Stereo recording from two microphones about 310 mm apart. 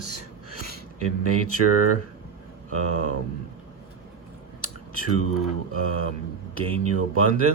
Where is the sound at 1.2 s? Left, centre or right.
Right.